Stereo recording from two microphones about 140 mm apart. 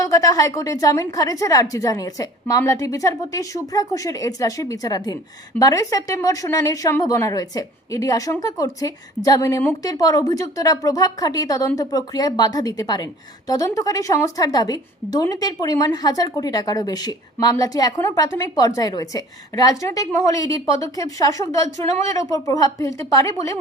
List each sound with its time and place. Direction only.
0.0 s a woman's voice: 25° left (ahead or behind)